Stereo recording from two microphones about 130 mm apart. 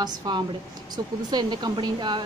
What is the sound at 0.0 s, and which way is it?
A woman's voice, 35° right (ahead or behind).